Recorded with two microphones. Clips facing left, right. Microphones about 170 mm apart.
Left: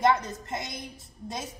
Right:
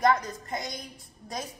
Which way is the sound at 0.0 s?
25° left (ahead or behind).